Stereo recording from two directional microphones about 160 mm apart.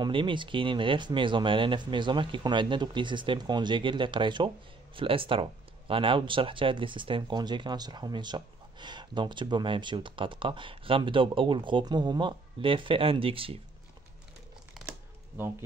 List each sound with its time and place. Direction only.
0.0 s speech: 30° right (ahead or behind)